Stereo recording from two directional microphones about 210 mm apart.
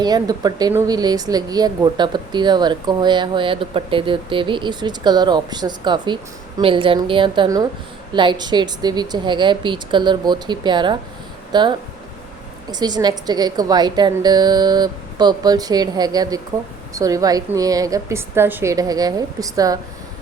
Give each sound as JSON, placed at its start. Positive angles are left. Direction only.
{"t": 0.0, "sound": "speech", "side_deg": -20}
{"t": 12.7, "sound": "a woman's voice", "side_deg": -20}